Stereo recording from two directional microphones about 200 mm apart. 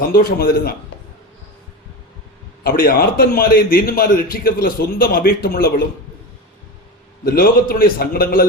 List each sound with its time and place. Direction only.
0.1 s a man's voice: 50° left (ahead or behind)
2.6 s a man's voice: 45° left (ahead or behind)
7.3 s a man's voice: 45° left (ahead or behind)